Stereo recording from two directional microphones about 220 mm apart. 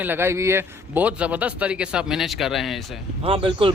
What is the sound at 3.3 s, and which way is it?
Speech, 25° right (ahead or behind).